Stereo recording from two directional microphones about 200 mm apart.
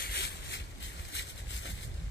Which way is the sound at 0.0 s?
55° left (ahead or behind).